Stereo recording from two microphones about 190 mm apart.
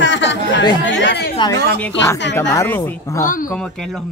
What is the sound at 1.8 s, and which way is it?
Speech, 5° left (ahead or behind).